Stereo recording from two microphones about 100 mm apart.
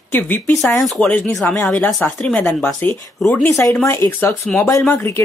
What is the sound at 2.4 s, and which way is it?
Speech, 25° left (ahead or behind).